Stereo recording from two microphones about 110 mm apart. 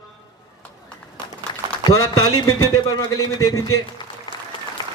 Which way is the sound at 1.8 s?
35° left (ahead or behind).